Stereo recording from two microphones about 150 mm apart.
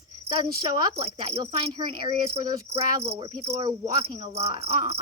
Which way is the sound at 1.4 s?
30° right (ahead or behind).